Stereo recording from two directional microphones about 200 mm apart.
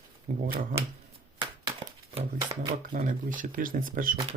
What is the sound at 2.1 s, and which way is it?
Speech, 25° right (ahead or behind).